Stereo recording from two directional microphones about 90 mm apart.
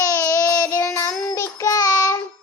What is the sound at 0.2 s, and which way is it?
Child singing, 40° left (ahead or behind).